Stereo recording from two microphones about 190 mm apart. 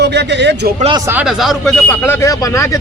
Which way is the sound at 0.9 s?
10° right (ahead or behind).